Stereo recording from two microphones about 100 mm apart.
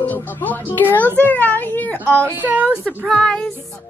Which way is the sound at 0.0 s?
15° left (ahead or behind).